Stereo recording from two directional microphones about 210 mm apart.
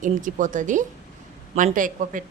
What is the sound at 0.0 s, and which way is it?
Speech, 40° right (ahead or behind).